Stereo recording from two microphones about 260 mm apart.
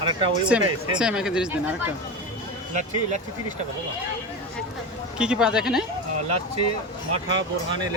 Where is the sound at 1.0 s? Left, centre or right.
Centre.